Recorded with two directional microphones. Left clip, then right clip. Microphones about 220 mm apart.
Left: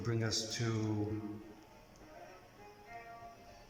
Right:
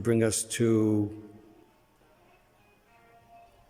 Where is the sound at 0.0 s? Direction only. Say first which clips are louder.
Right 11 dB; 40° right (ahead or behind).